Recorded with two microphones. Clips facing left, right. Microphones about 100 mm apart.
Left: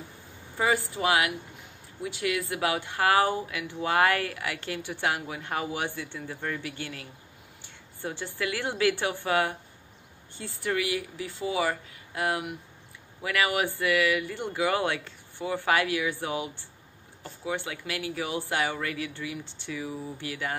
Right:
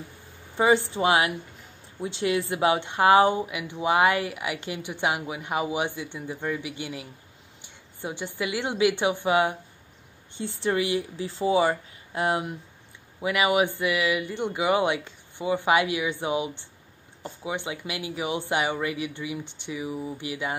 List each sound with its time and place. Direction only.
0.6 s a woman's voice: 25° right (ahead or behind)